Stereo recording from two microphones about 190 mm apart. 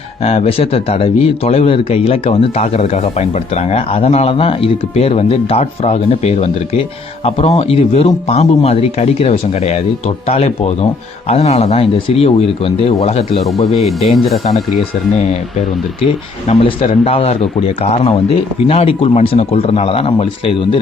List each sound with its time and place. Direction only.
0.2 s a man's voice: 30° left (ahead or behind)
13.7 s speech: centre (ahead or behind)
16.5 s a man's voice: 30° left (ahead or behind)